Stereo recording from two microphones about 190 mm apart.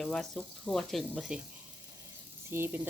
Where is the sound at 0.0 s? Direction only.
5° left (ahead or behind).